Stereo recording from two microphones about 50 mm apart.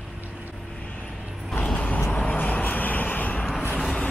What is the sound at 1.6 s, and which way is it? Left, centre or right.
Vehicle, centre.